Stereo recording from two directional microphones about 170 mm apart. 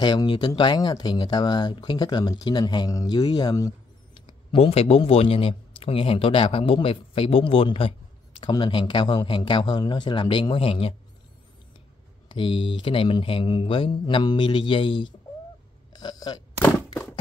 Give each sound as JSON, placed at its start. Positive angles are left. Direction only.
{"t": 0.0, "sound": "speech", "side_deg": 25}
{"t": 12.3, "sound": "speech", "side_deg": 30}
{"t": 15.9, "sound": "a sound", "side_deg": 25}